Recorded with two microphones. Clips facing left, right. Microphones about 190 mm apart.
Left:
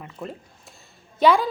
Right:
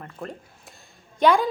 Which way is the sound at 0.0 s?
5° left (ahead or behind).